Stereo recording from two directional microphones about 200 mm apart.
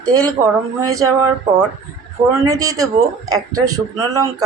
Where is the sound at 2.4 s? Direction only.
15° right (ahead or behind).